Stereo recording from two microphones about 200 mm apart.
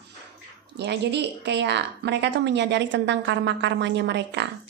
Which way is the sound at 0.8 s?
60° right (ahead or behind).